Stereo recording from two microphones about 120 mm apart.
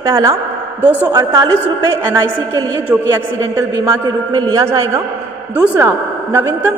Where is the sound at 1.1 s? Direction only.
30° right (ahead or behind).